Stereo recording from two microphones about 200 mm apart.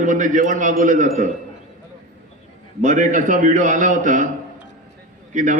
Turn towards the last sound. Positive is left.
turn(degrees=-40)  # may be behind; listen again after turning